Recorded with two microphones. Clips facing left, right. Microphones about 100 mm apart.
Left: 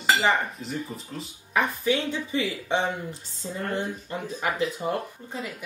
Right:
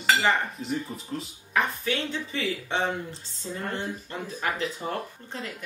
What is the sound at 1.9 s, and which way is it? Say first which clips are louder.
Speech: left 4 dB; 15° left (ahead or behind).